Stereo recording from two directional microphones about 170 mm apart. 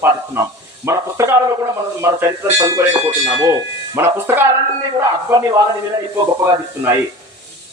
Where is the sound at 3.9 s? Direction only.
15° right (ahead or behind).